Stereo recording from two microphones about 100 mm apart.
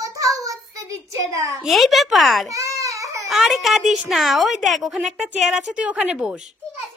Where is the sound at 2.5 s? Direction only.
30° right (ahead or behind).